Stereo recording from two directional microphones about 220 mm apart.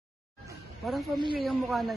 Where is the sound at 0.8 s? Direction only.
Centre (ahead or behind).